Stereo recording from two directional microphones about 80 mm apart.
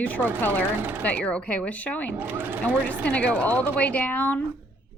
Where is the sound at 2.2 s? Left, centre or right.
Right.